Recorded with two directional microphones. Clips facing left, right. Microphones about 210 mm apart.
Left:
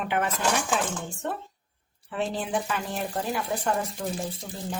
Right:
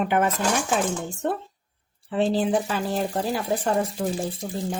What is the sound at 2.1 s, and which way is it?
Speech, 30° right (ahead or behind).